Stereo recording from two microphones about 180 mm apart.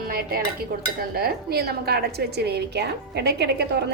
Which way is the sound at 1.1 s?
60° right (ahead or behind).